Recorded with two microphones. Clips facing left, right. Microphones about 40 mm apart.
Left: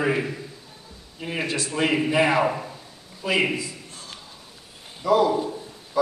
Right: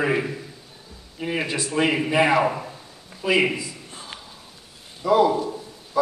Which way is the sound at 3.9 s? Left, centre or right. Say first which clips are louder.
Right 3 dB; right.